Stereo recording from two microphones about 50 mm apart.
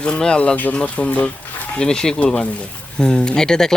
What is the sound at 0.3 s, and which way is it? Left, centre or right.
Speech, left.